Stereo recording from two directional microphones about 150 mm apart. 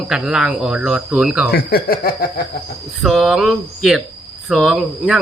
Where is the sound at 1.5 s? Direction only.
90° left.